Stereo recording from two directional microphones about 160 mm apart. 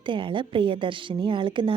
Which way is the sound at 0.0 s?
30° right (ahead or behind).